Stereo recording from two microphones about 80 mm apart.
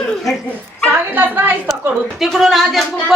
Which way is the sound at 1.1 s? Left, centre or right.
Right.